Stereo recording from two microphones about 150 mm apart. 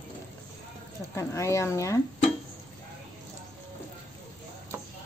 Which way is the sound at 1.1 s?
20° left (ahead or behind).